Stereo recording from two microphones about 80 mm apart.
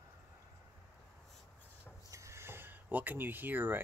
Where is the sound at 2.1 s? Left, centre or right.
Right.